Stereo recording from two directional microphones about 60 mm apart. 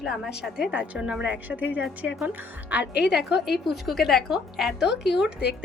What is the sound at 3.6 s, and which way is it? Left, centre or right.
Speech, centre.